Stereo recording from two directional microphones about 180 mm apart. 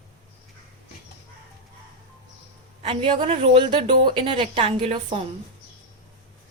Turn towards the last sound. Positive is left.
turn(degrees=-35)  # may be behind; listen again after turning